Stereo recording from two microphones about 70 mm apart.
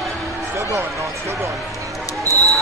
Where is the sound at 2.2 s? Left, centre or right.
Right.